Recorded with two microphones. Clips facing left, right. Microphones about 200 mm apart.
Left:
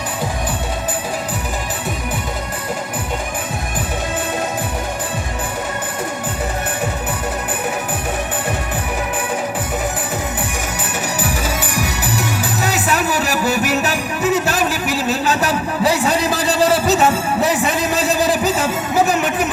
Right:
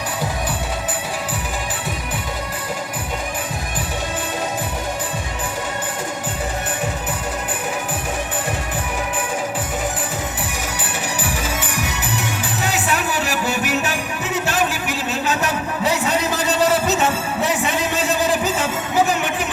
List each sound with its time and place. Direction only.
11.2 s music: 40° left (ahead or behind)